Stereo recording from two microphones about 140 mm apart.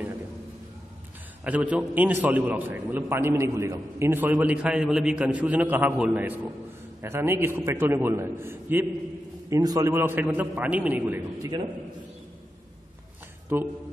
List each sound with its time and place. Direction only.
1.4 s a man's voice: 10° right (ahead or behind)
9.5 s a man's voice: 25° right (ahead or behind)
11.4 s a man's voice: 30° right (ahead or behind)
13.5 s a man's voice: 15° right (ahead or behind)